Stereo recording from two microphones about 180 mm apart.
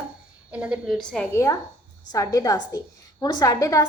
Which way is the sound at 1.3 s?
15° left (ahead or behind).